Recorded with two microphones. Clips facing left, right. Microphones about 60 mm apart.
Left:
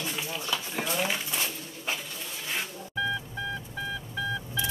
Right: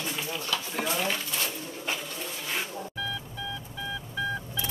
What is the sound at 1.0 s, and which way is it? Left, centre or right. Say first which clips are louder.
Dishes: even; centre.